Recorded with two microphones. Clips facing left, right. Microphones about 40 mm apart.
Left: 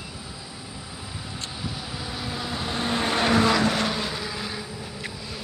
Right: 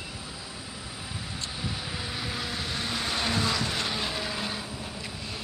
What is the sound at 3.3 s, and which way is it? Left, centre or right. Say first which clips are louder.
Vehicle: left 11 dB; left.